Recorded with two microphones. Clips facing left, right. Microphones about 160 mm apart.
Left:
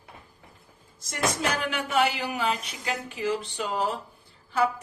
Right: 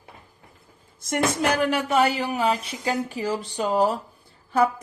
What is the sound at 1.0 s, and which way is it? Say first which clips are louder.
Music: right 5 dB; 55° right (ahead or behind).